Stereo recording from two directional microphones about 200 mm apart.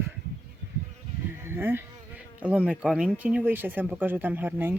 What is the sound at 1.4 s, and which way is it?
Speech, 10° right (ahead or behind).